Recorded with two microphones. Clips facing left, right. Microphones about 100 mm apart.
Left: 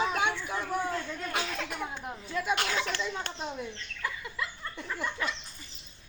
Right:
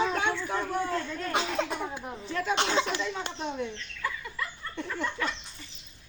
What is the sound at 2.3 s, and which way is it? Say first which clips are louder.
Speech: right 1 dB; 10° left (ahead or behind).